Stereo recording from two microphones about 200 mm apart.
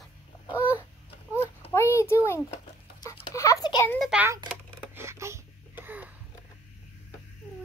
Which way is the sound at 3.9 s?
Centre (ahead or behind).